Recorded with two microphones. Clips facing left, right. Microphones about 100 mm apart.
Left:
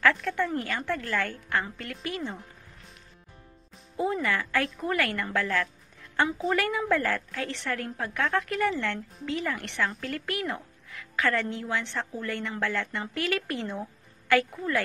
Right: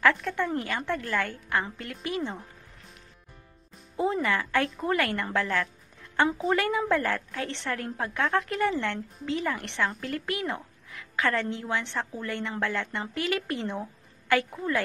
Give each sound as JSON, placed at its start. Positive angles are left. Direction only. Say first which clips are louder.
{"t": 0.0, "sound": "a woman's voice", "louder": "even", "side_deg": -15}
{"t": 3.9, "sound": "a woman's voice", "louder": "right 1 dB", "side_deg": -25}